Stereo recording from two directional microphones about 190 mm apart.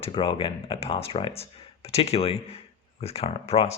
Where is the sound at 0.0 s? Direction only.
25° left (ahead or behind).